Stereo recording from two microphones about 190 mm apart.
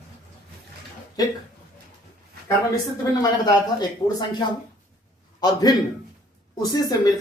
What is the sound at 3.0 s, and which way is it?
A man's voice, 20° left (ahead or behind).